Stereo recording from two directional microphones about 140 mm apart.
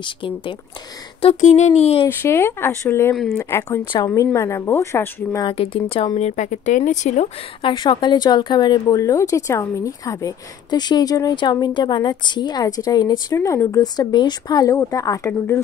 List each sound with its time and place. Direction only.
0.0 s speech: 35° left (ahead or behind)
1.3 s speech: 55° left (ahead or behind)
2.0 s a woman's voice: 15° left (ahead or behind)
3.8 s speech: 35° left (ahead or behind)
4.1 s a woman's voice: 20° left (ahead or behind)
5.4 s speech: 40° left (ahead or behind)
6.1 s speech: 55° left (ahead or behind)
7.6 s a woman's voice: 35° left (ahead or behind)